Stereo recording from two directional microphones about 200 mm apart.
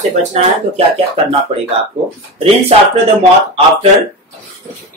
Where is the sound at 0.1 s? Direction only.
35° right (ahead or behind).